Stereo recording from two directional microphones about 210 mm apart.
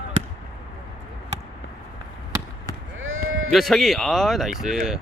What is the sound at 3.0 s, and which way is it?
Sheep, 70° right (ahead or behind).